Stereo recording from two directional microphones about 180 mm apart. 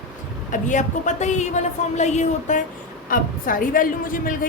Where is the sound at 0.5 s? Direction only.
45° left (ahead or behind).